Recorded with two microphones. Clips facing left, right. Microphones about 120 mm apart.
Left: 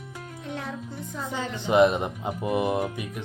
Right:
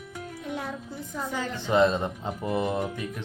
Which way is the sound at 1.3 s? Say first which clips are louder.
Left 2 dB; 20° left (ahead or behind).